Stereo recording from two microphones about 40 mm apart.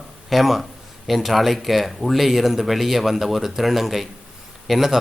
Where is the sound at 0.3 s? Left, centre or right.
Centre.